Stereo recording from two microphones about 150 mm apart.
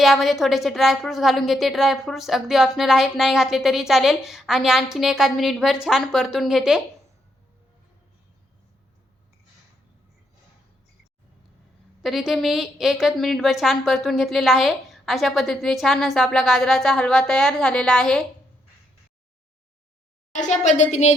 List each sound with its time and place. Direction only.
0.0 s a woman's voice: centre (ahead or behind)
12.0 s a woman's voice: centre (ahead or behind)
20.3 s a woman's voice: 55° left (ahead or behind)